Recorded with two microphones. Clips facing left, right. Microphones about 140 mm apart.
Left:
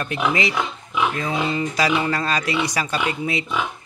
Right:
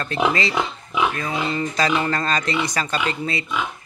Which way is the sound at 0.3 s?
15° left (ahead or behind).